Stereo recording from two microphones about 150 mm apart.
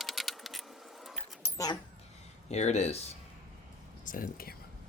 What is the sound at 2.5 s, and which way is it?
Speech, 45° left (ahead or behind).